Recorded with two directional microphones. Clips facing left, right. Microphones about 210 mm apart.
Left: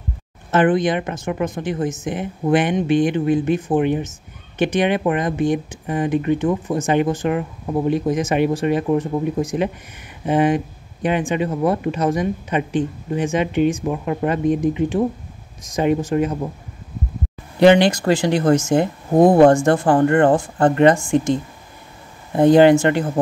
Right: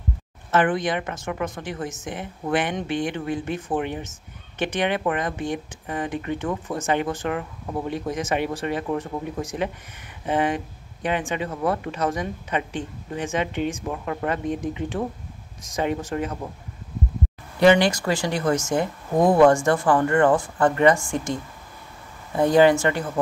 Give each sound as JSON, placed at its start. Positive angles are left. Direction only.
{"t": 0.5, "sound": "speech", "side_deg": 20}
{"t": 17.6, "sound": "speech", "side_deg": 25}